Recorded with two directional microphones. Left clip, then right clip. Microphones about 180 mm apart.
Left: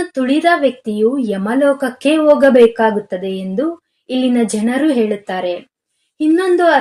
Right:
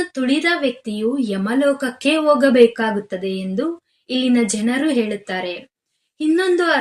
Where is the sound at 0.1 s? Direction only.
30° left (ahead or behind).